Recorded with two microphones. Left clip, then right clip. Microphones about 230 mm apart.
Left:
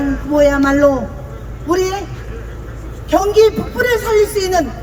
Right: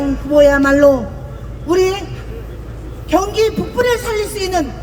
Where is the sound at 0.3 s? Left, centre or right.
Right.